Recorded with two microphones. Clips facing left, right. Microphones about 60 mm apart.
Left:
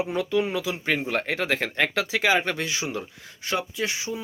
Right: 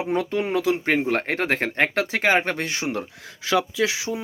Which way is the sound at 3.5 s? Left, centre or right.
Right.